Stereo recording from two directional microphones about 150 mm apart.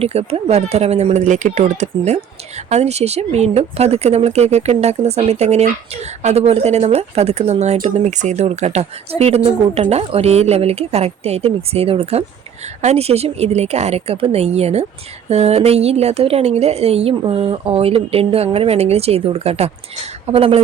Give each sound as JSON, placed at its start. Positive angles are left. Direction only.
{"t": 0.0, "sound": "speech", "side_deg": -45}